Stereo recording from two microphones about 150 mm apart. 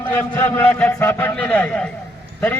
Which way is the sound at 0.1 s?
15° left (ahead or behind).